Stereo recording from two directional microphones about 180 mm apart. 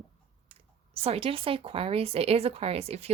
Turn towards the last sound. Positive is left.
turn(degrees=-35)  # may be behind; listen again after turning